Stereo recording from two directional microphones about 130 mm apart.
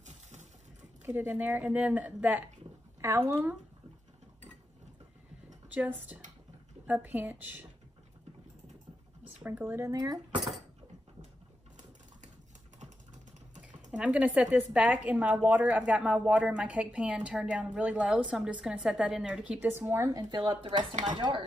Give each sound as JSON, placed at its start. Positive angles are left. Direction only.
{"t": 1.0, "sound": "speech", "side_deg": -15}
{"t": 5.7, "sound": "speech", "side_deg": -10}
{"t": 9.2, "sound": "speech", "side_deg": -15}
{"t": 13.6, "sound": "speech", "side_deg": -10}
{"t": 20.1, "sound": "speech", "side_deg": -30}